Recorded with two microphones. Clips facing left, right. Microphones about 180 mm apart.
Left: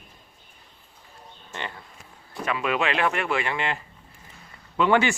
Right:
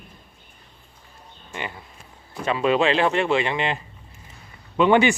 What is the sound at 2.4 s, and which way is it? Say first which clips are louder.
Speech: right 6 dB; 30° right (ahead or behind).